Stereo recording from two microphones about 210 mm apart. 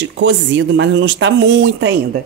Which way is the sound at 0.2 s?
60° right (ahead or behind).